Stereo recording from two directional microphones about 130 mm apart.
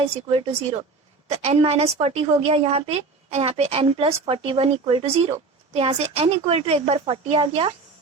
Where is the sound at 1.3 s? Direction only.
50° right (ahead or behind).